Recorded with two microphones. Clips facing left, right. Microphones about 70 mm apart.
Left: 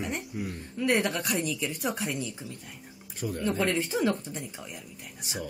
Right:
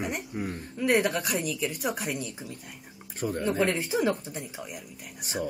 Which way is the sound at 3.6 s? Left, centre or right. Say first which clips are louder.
Right 1 dB; centre.